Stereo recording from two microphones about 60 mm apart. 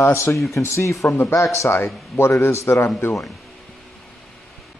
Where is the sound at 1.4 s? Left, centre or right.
Left.